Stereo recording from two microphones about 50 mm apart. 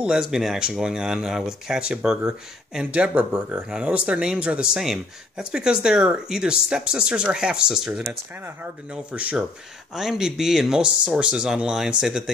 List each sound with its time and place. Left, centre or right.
0.0 s speech: centre
4.7 s speech: centre
9.1 s speech: right
9.9 s speech: centre